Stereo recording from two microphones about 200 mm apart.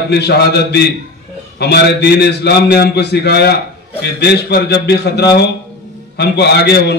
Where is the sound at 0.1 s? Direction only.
55° left (ahead or behind).